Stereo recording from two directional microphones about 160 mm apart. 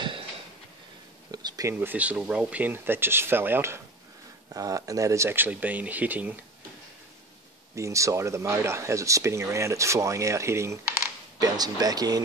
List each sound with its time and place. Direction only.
1.3 s speech: 25° right (ahead or behind)
7.7 s speech: 20° right (ahead or behind)